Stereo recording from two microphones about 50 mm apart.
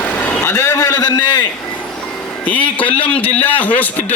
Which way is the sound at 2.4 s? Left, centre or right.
Left.